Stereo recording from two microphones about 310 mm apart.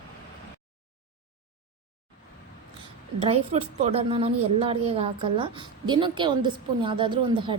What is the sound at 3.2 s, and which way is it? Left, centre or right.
A woman's voice, centre.